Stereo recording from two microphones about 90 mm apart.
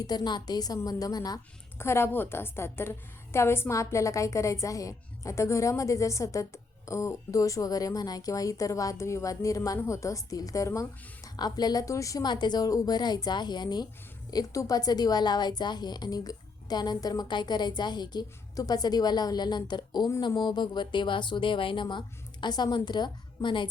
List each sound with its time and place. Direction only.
0.0 s a woman's voice: 50° left (ahead or behind)
1.8 s a woman's voice: 25° left (ahead or behind)
11.3 s a woman's voice: 50° left (ahead or behind)
12.2 s a woman's voice: 55° left (ahead or behind)
14.3 s a woman's voice: 40° left (ahead or behind); by 23.6 s 65° left (ahead or behind)